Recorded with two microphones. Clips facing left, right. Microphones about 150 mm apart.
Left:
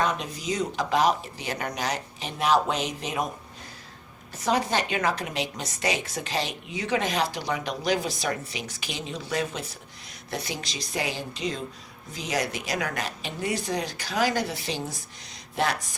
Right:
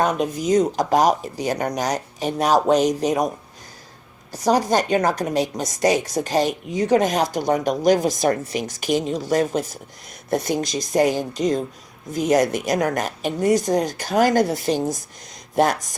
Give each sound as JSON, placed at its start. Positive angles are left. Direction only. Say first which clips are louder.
{"t": 0.0, "sound": "speech", "louder": "right 7 dB", "side_deg": -45}
{"t": 4.3, "sound": "speech", "louder": "right 7 dB", "side_deg": -40}